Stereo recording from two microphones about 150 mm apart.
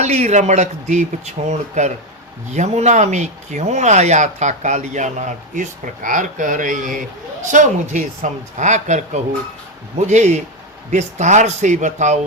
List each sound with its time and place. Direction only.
0.0 s speech: 45° right (ahead or behind)